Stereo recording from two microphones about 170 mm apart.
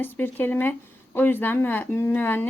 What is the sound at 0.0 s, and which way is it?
Speech, 10° left (ahead or behind).